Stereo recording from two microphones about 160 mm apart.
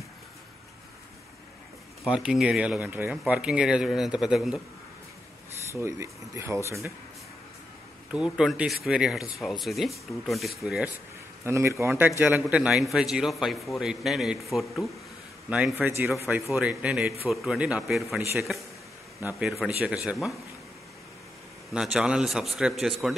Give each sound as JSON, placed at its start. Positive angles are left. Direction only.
{"t": 2.0, "sound": "a man's voice", "side_deg": -5}
{"t": 5.7, "sound": "speech", "side_deg": -15}
{"t": 8.1, "sound": "a man's voice", "side_deg": -5}
{"t": 11.4, "sound": "a man's voice", "side_deg": -15}
{"t": 19.2, "sound": "a man's voice", "side_deg": -10}
{"t": 21.7, "sound": "a man's voice", "side_deg": -5}